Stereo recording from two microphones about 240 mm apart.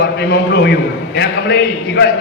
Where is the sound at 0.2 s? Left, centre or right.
Left.